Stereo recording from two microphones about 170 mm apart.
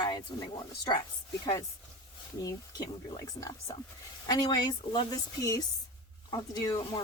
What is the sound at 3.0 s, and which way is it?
Speech, 20° left (ahead or behind).